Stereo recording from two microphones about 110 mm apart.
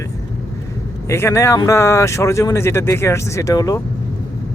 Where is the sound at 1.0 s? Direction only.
25° left (ahead or behind).